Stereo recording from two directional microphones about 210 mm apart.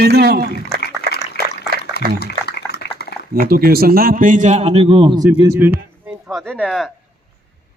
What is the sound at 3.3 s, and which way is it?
A man's voice, 45° right (ahead or behind).